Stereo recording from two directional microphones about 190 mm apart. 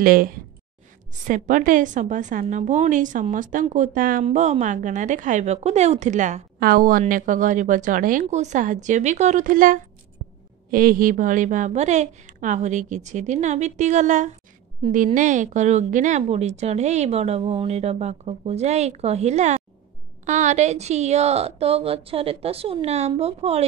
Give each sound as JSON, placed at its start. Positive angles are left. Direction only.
{"t": 0.0, "sound": "a woman's voice", "side_deg": -50}